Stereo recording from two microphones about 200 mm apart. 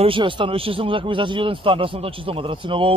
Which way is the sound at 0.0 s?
25° right (ahead or behind).